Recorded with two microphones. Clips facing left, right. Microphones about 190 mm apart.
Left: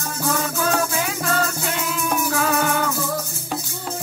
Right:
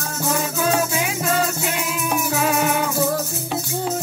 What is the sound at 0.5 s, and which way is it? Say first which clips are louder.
Music: right 1 dB; 10° right (ahead or behind).